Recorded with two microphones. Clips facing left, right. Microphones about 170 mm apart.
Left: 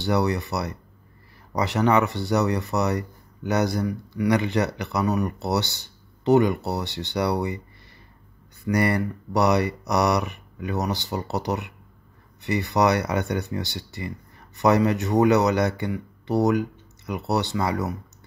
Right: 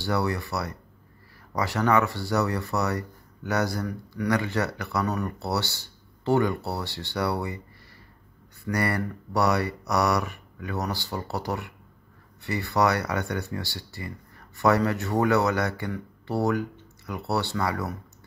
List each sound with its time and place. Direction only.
0.0 s speech: 20° left (ahead or behind)
8.6 s speech: 20° left (ahead or behind)